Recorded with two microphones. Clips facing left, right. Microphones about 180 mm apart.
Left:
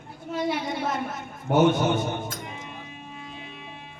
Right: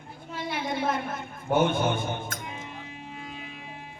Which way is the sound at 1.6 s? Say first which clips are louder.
Left 5 dB; 55° right (ahead or behind).